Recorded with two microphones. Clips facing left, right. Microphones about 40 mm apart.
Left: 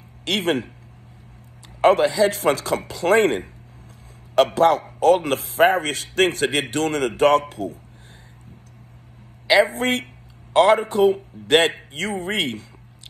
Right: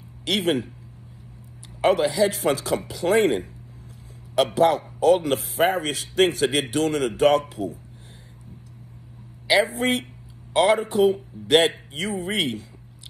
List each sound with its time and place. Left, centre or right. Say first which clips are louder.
0.3 s a man's voice: left 1 dB; left
1.8 s a man's voice: left 3 dB; left
9.5 s speech: left 3 dB; left